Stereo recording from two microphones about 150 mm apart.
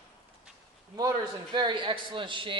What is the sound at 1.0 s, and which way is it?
A man's voice, 30° right (ahead or behind).